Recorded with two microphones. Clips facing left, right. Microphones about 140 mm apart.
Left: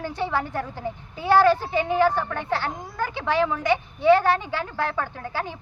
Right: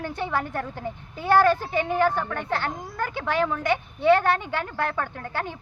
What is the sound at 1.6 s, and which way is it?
A woman's voice, 20° left (ahead or behind).